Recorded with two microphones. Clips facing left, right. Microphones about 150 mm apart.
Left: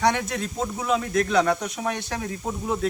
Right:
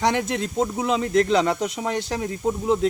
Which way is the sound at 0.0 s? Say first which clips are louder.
Right 1 dB; 25° right (ahead or behind).